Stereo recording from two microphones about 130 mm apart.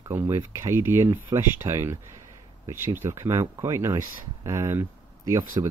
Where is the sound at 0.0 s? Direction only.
20° right (ahead or behind).